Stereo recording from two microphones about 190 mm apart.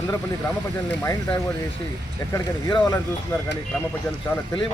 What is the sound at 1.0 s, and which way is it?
A man's voice, 15° left (ahead or behind).